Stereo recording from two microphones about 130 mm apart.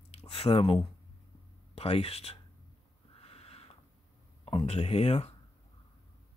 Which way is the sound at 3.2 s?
50° left (ahead or behind).